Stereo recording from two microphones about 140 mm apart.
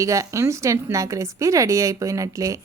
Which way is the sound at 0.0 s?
20° right (ahead or behind).